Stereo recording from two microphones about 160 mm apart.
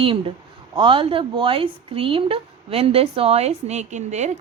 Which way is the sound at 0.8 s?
30° right (ahead or behind).